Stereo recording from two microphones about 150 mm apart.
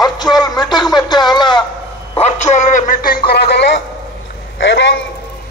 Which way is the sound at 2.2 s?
50° left (ahead or behind).